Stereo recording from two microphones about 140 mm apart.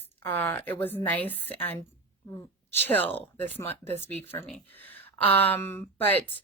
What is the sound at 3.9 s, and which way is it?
Speech, 50° right (ahead or behind).